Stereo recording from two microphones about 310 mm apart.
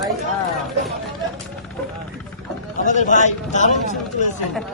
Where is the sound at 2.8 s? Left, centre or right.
Left.